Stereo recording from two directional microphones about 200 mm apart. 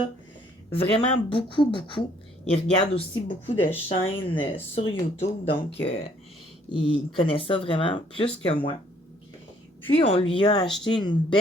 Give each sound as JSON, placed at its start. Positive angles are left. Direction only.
{"t": 0.7, "sound": "speech", "side_deg": 25}
{"t": 6.7, "sound": "speech", "side_deg": 25}
{"t": 9.8, "sound": "speech", "side_deg": 30}